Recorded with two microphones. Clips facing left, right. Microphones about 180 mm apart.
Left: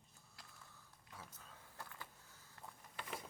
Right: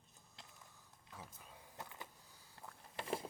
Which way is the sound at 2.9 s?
30° right (ahead or behind).